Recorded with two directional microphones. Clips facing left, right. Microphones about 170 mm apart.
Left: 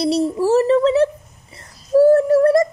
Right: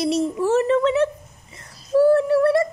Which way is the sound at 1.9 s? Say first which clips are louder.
Left 4 dB; 40° left (ahead or behind).